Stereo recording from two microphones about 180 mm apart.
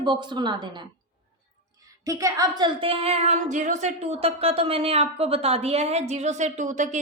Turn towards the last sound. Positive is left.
turn(degrees=-45)  # may be behind; listen again after turning